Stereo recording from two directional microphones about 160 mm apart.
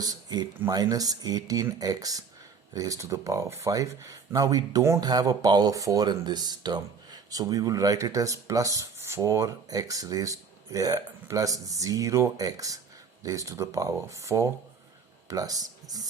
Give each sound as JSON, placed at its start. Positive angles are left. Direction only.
{"t": 0.0, "sound": "speech", "side_deg": -25}